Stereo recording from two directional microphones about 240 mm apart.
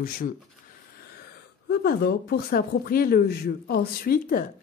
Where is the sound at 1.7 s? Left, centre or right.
Left.